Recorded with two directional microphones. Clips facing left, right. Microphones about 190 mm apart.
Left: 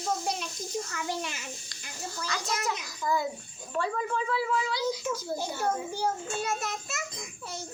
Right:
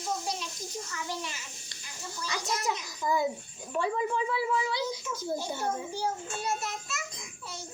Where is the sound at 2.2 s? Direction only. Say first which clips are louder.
Right 1 dB; 20° right (ahead or behind).